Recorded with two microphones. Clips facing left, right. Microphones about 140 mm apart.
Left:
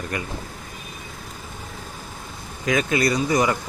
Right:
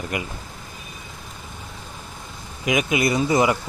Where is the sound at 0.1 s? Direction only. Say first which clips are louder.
Right 2 dB; 20° right (ahead or behind).